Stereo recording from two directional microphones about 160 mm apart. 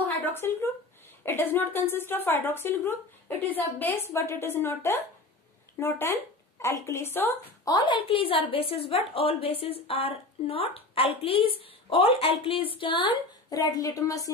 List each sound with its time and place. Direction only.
0.2 s a woman's voice: 15° left (ahead or behind)
7.7 s a woman's voice: 30° left (ahead or behind)